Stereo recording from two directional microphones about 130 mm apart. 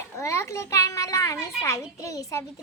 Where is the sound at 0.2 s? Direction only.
20° left (ahead or behind).